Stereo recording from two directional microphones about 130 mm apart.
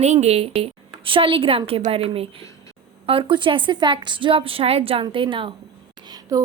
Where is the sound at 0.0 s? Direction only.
60° right (ahead or behind); by 5.5 s 40° right (ahead or behind).